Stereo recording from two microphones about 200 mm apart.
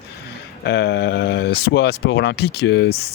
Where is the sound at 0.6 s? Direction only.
55° left (ahead or behind).